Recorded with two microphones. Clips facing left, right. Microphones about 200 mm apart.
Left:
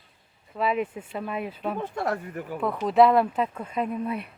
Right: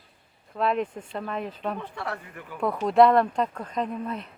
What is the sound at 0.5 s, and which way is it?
Speech, 5° left (ahead or behind).